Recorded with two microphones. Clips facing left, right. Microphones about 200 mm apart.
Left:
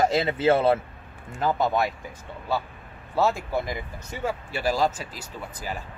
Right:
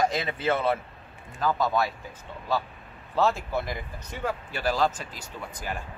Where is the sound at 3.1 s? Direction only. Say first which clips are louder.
Left 1 dB; 10° left (ahead or behind).